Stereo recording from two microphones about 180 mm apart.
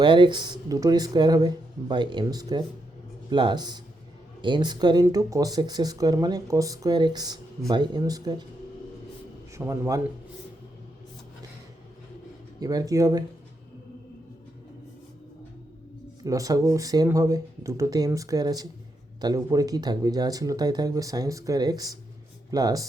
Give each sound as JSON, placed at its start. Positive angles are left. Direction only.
{"t": 0.0, "sound": "speech", "side_deg": -25}
{"t": 9.6, "sound": "a man's voice", "side_deg": -15}
{"t": 12.5, "sound": "speech", "side_deg": -20}
{"t": 16.2, "sound": "speech", "side_deg": -20}